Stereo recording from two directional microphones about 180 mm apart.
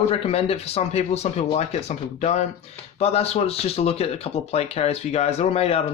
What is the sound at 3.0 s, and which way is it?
Speech, 35° left (ahead or behind).